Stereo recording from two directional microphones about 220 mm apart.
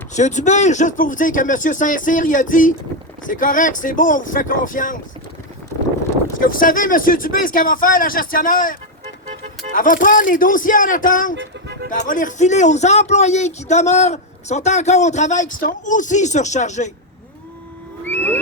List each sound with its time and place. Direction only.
0.1 s speech: 30° left (ahead or behind)
6.4 s speech: 40° left (ahead or behind)
11.3 s music: 50° right (ahead or behind)
11.9 s speech: 35° left (ahead or behind)
18.0 s a sound: 10° left (ahead or behind)